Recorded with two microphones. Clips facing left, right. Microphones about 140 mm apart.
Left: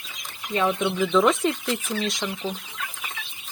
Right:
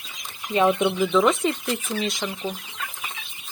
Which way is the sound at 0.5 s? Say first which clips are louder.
Right 4 dB; 20° right (ahead or behind).